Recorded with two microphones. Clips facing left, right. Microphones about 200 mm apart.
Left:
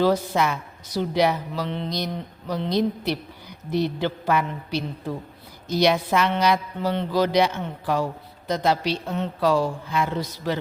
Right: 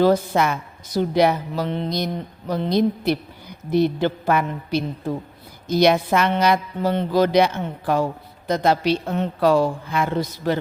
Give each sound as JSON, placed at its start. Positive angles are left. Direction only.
{"t": 0.0, "sound": "speech", "side_deg": -50}